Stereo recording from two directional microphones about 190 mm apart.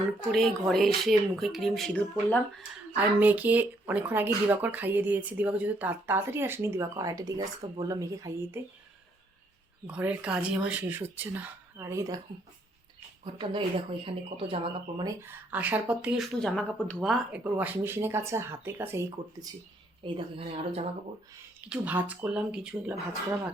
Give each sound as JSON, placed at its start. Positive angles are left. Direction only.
{"t": 0.3, "sound": "speech", "side_deg": 0}
{"t": 2.9, "sound": "speech", "side_deg": -10}
{"t": 9.8, "sound": "speech", "side_deg": -5}
{"t": 13.2, "sound": "speech", "side_deg": -25}
{"t": 15.2, "sound": "speech", "side_deg": -10}
{"t": 20.0, "sound": "speech", "side_deg": -25}
{"t": 21.7, "sound": "speech", "side_deg": -10}